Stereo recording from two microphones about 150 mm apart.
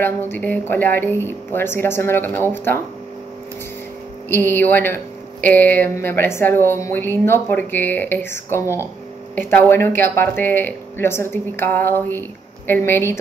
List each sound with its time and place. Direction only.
0.0 s speech: 15° left (ahead or behind)
4.3 s speech: 15° left (ahead or behind)